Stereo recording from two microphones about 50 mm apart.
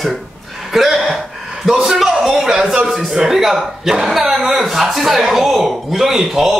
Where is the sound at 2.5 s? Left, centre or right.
Centre.